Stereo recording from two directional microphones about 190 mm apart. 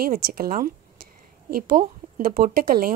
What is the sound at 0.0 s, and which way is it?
A woman's voice, 50° right (ahead or behind).